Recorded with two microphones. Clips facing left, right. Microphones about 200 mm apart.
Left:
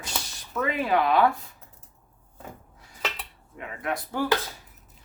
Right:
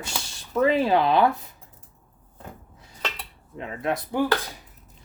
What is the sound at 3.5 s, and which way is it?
Speech, 25° right (ahead or behind).